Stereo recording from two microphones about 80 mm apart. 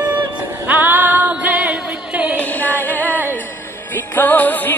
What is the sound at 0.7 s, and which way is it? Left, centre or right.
Music, right.